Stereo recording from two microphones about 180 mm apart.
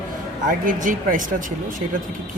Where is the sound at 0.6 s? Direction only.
50° right (ahead or behind).